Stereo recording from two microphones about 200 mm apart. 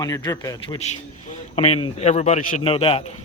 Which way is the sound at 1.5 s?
30° left (ahead or behind).